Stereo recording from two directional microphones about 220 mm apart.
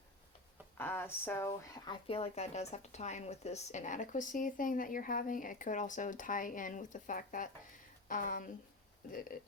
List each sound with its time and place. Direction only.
0.8 s speech: 10° left (ahead or behind); by 9.5 s 40° left (ahead or behind)